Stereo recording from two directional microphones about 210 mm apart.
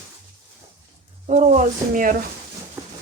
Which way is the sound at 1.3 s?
35° right (ahead or behind).